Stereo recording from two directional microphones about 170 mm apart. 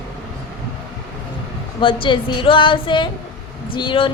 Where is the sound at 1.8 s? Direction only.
30° left (ahead or behind).